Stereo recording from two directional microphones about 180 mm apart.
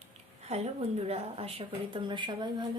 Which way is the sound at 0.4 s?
35° right (ahead or behind).